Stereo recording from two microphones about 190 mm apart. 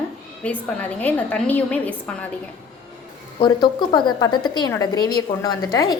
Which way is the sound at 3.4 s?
25° left (ahead or behind).